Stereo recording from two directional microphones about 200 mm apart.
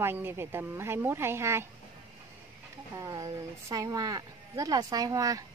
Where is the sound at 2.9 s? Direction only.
15° right (ahead or behind).